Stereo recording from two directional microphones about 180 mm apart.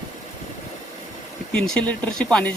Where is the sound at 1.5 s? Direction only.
5° left (ahead or behind).